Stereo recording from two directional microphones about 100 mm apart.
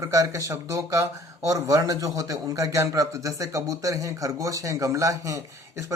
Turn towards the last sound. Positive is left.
turn(degrees=-30)  # may be behind; listen again after turning